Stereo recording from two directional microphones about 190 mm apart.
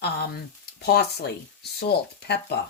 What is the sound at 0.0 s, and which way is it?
Speech, 60° left (ahead or behind).